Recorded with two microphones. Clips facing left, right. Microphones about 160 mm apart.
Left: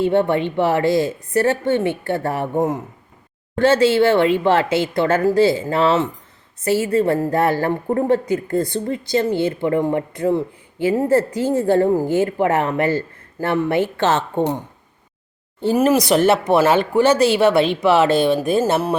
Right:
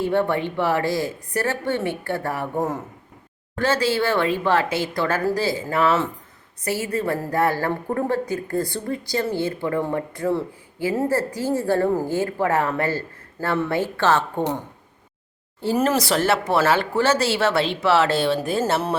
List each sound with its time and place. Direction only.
0.0 s a woman's voice: 20° left (ahead or behind)
15.6 s speech: 10° left (ahead or behind)